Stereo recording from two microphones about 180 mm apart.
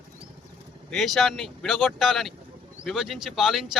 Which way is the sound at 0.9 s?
Centre (ahead or behind).